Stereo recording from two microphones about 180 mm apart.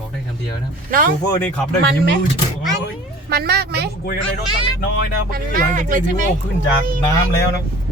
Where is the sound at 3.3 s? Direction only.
60° right (ahead or behind).